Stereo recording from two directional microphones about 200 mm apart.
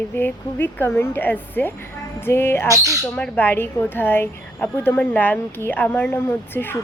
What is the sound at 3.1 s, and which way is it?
A woman's voice, 5° left (ahead or behind).